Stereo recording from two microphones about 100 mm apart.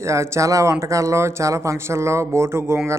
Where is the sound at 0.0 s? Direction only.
30° right (ahead or behind).